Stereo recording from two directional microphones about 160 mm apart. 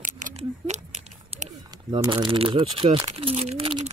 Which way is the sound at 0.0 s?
55° right (ahead or behind).